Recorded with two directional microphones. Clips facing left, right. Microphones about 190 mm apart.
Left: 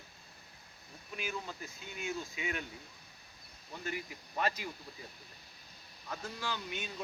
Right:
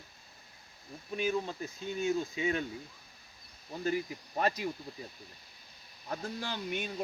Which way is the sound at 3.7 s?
35° right (ahead or behind).